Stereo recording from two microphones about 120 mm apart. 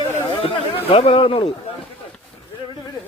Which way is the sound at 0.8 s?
55° left (ahead or behind).